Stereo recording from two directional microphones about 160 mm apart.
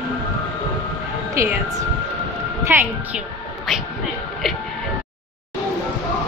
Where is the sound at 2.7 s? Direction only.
15° right (ahead or behind).